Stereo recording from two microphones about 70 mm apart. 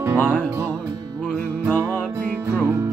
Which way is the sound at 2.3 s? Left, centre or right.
Right.